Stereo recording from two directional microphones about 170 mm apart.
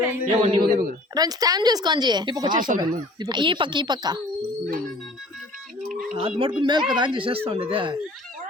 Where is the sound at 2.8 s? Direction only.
25° right (ahead or behind).